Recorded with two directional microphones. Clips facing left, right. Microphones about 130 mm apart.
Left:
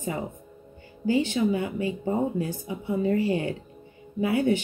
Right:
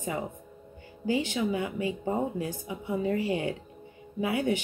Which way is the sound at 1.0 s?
15° right (ahead or behind).